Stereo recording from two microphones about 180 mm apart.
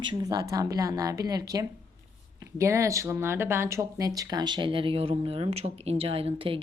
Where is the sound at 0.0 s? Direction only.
25° right (ahead or behind).